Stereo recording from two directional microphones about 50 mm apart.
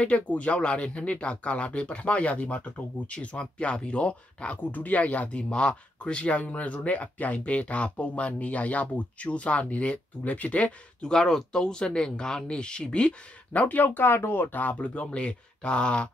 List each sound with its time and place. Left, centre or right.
0.0 s speech: left
4.6 s speech: left
11.0 s speech: centre
13.5 s speech: left
14.0 s speech: left